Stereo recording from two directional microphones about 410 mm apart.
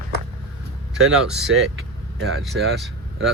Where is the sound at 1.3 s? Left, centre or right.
Centre.